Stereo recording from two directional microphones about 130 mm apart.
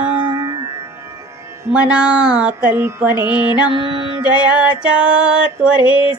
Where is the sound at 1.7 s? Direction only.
10° right (ahead or behind).